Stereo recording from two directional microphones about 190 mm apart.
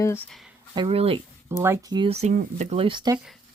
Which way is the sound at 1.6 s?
15° right (ahead or behind).